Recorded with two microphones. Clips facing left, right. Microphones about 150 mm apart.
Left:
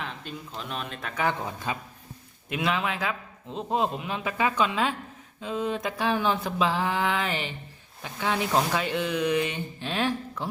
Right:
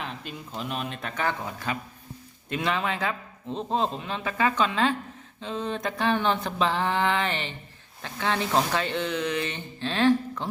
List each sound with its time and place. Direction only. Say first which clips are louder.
0.0 s speech: even; 5° right (ahead or behind)
1.1 s speech: left 2 dB; 15° left (ahead or behind)
2.5 s speech: even; 5° left (ahead or behind)